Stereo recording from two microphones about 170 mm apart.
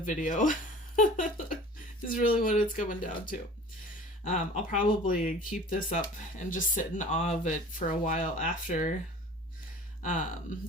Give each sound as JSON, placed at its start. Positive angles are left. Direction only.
{"t": 0.0, "sound": "speech", "side_deg": 50}
{"t": 10.0, "sound": "speech", "side_deg": 50}